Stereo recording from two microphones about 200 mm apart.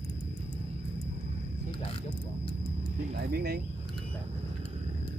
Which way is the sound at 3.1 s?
50° right (ahead or behind).